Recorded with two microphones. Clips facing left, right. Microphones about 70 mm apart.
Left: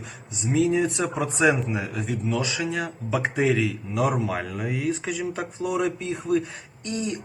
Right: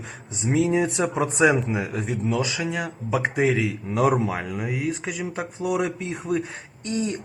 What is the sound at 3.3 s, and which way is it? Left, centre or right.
A man's voice, centre.